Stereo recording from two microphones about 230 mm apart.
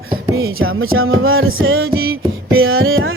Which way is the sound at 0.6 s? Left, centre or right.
Right.